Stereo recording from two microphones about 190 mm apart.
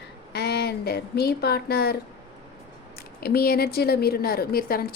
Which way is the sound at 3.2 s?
55° left (ahead or behind).